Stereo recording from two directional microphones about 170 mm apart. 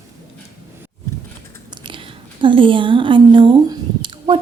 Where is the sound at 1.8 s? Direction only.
30° right (ahead or behind).